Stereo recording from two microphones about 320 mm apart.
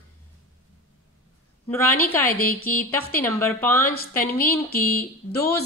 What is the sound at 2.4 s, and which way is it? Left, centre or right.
Speech, left.